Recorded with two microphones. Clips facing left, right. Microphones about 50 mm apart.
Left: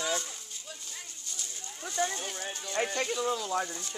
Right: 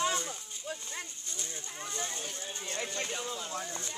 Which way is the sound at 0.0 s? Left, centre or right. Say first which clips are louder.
Right 1 dB; right.